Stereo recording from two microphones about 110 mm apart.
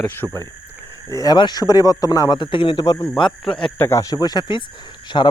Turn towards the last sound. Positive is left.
turn(degrees=45)  # may be behind; listen again after turning